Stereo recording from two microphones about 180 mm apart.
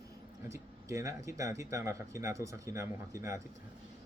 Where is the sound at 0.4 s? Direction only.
15° right (ahead or behind).